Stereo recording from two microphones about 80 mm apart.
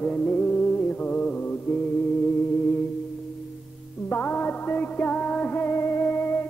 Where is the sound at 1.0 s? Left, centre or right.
Centre.